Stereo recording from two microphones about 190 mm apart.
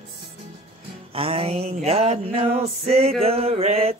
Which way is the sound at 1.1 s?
30° right (ahead or behind).